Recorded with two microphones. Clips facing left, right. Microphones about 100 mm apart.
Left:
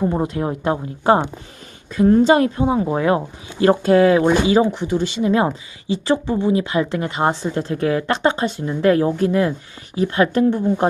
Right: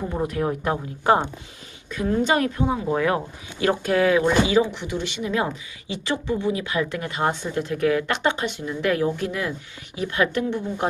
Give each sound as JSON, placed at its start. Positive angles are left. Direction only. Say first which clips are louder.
{"t": 0.1, "sound": "speech", "louder": "left 3 dB", "side_deg": 25}